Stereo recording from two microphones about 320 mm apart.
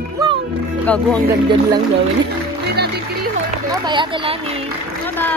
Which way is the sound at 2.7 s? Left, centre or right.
Right.